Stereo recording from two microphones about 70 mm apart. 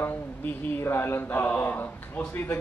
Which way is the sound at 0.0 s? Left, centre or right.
Left.